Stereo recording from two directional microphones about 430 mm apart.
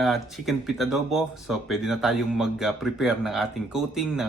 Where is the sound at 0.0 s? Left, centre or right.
Centre.